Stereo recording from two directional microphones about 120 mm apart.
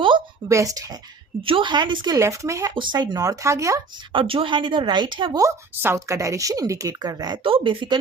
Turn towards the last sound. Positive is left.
turn(degrees=-45)  # may be behind; listen again after turning